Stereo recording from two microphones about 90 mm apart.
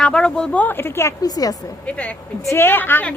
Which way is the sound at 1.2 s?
45° left (ahead or behind).